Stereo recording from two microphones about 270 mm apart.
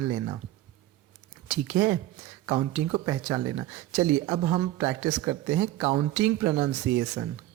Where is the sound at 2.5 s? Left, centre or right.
Centre.